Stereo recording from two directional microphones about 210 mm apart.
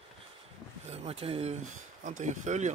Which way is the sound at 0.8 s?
30° right (ahead or behind).